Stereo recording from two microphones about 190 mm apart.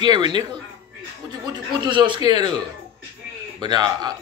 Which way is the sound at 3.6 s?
20° right (ahead or behind).